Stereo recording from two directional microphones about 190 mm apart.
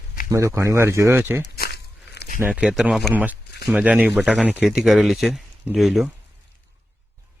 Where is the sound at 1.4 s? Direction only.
55° left (ahead or behind).